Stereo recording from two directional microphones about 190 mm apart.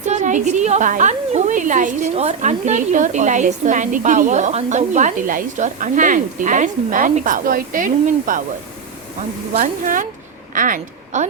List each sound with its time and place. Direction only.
0.0 s a woman's voice: 40° right (ahead or behind)
9.6 s a woman's voice: 45° right (ahead or behind)